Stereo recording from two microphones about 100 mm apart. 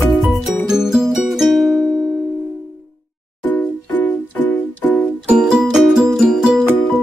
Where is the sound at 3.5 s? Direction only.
20° left (ahead or behind).